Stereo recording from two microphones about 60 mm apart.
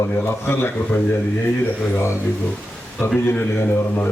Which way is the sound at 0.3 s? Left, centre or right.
Left.